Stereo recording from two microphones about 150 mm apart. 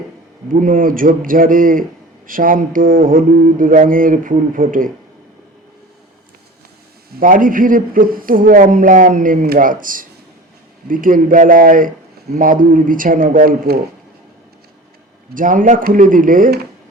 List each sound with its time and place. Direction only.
0.6 s mantra: 65° right (ahead or behind)
7.2 s a man's voice: 65° right (ahead or behind)
15.4 s a man's voice: 65° right (ahead or behind)